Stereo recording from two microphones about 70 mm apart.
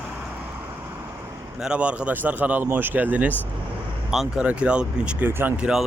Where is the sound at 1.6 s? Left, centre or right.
Centre.